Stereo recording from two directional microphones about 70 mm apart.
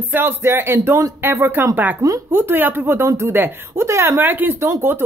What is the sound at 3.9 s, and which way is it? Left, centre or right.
Speech, right.